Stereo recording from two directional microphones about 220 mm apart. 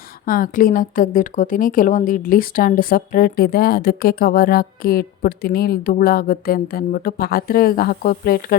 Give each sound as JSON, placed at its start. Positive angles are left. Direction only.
{"t": 0.3, "sound": "speech", "side_deg": 40}